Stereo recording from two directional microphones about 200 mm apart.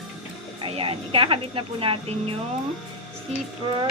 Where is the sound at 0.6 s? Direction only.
25° right (ahead or behind).